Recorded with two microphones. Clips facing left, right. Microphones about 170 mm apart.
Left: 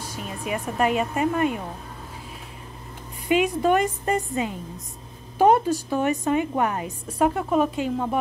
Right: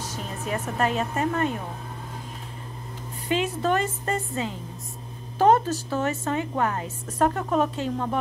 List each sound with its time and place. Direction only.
0.0 s speech: 10° left (ahead or behind)
3.3 s a woman's voice: 15° left (ahead or behind)